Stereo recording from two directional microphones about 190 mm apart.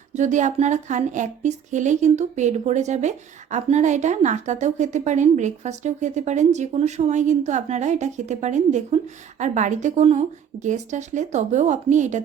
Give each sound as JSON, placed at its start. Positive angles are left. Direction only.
{"t": 0.1, "sound": "speech", "side_deg": -40}